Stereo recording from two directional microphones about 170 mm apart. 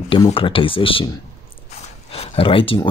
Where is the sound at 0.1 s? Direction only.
30° left (ahead or behind).